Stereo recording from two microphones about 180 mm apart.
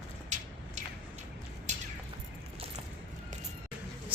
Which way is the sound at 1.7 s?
40° right (ahead or behind).